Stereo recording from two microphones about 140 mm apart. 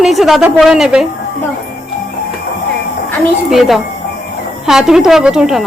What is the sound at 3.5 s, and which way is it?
A woman's voice, centre (ahead or behind).